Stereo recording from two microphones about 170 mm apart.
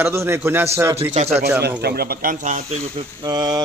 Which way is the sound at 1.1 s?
40° right (ahead or behind).